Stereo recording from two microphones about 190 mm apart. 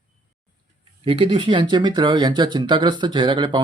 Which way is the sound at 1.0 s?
25° right (ahead or behind).